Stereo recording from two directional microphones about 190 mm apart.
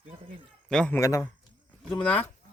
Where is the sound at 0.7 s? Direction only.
5° left (ahead or behind).